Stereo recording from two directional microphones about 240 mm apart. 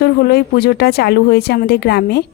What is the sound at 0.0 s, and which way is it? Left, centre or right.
Speech, left.